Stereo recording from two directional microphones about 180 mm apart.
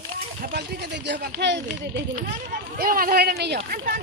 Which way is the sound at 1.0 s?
75° right (ahead or behind).